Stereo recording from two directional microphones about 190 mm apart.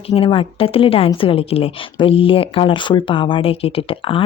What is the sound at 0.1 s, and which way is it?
A woman's voice, 30° left (ahead or behind).